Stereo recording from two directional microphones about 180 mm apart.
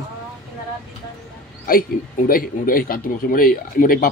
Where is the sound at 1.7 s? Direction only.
50° left (ahead or behind).